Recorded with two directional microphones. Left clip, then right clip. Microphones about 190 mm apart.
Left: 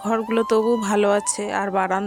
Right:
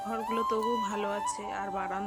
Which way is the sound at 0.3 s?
55° left (ahead or behind).